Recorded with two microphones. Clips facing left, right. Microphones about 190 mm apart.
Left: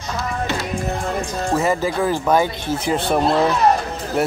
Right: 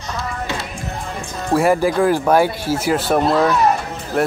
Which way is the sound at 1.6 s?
10° right (ahead or behind).